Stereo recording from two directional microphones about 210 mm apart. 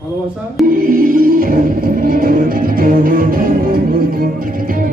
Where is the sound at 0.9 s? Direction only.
40° right (ahead or behind).